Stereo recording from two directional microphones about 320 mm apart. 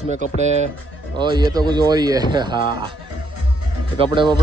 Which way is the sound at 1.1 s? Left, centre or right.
Centre.